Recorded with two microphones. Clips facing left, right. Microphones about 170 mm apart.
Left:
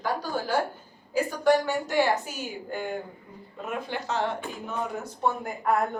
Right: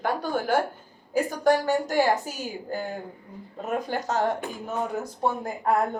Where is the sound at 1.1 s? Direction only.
45° right (ahead or behind).